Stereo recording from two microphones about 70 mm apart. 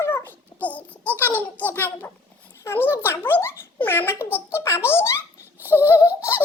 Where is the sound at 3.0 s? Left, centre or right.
Left.